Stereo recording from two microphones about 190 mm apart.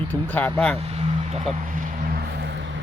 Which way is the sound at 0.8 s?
35° right (ahead or behind).